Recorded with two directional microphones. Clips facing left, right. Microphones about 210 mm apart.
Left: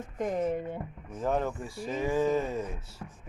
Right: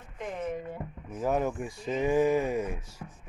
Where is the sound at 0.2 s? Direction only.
40° left (ahead or behind).